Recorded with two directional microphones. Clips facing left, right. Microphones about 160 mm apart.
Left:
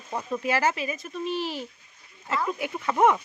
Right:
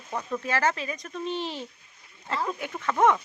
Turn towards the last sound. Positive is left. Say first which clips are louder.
# left 1 dB
turn(degrees=10)  # may be behind; listen again after turning